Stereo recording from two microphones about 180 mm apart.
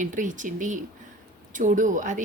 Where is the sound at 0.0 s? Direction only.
45° right (ahead or behind).